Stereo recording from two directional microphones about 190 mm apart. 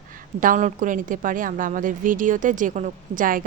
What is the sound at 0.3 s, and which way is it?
A woman's voice, 45° right (ahead or behind).